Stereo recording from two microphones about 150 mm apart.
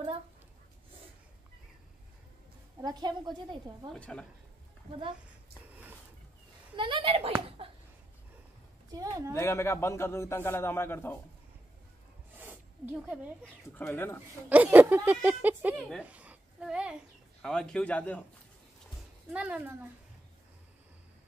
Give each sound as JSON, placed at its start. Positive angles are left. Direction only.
{"t": 2.8, "sound": "a woman's voice", "side_deg": -25}
{"t": 3.9, "sound": "a woman's voice", "side_deg": 5}
{"t": 5.7, "sound": "a sound", "side_deg": -10}
{"t": 6.8, "sound": "speech", "side_deg": -35}
{"t": 7.4, "sound": "a sound", "side_deg": -35}
{"t": 8.9, "sound": "a woman's voice", "side_deg": -20}
{"t": 9.3, "sound": "a man's voice", "side_deg": 20}
{"t": 12.4, "sound": "snake", "side_deg": -15}
{"t": 13.7, "sound": "a man's voice", "side_deg": 10}
{"t": 14.5, "sound": "speech", "side_deg": -10}
{"t": 16.0, "sound": "a sound", "side_deg": -10}
{"t": 17.4, "sound": "a man's voice", "side_deg": 5}
{"t": 19.3, "sound": "speech", "side_deg": -10}